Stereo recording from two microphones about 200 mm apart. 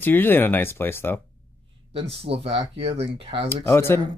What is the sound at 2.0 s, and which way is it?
Speech, 30° right (ahead or behind).